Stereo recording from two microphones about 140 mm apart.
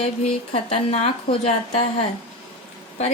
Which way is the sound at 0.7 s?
50° left (ahead or behind).